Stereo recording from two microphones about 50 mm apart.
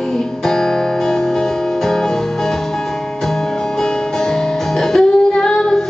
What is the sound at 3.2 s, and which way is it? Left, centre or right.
Music, centre.